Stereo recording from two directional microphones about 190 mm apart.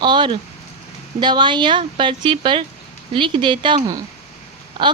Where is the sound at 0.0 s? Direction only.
25° right (ahead or behind).